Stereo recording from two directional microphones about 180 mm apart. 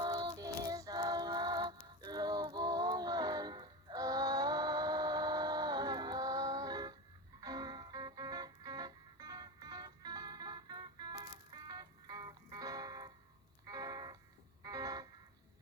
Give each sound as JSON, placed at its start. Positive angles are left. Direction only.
{"t": 0.0, "sound": "music", "side_deg": -25}